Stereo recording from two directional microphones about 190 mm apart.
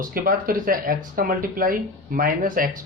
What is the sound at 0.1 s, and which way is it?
Speech, 50° right (ahead or behind).